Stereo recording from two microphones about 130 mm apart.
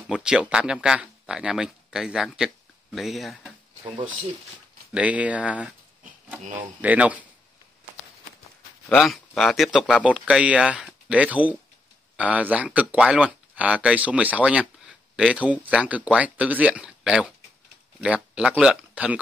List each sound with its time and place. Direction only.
0.1 s speech: 5° right (ahead or behind)
3.8 s speech: 35° right (ahead or behind)
4.9 s speech: 10° right (ahead or behind)
6.8 s speech: 10° right (ahead or behind)
8.8 s speech: 5° left (ahead or behind)